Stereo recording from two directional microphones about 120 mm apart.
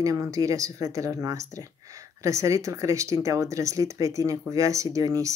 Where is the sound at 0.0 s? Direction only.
30° right (ahead or behind).